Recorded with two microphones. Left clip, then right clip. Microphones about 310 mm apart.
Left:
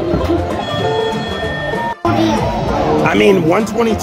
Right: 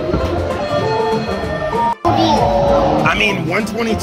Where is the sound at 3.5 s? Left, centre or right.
Centre.